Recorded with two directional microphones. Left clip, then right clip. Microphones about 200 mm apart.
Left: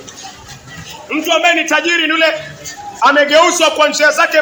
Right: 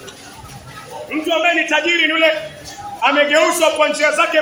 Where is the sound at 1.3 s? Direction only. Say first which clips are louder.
Left 4 dB; 35° left (ahead or behind).